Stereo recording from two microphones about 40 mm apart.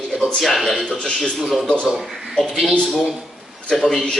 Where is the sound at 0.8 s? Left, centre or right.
Left.